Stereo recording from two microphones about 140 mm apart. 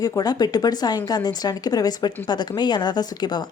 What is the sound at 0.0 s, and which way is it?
Speech, 25° left (ahead or behind).